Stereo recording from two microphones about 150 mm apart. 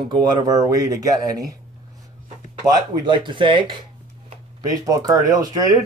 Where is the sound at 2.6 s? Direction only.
30° right (ahead or behind).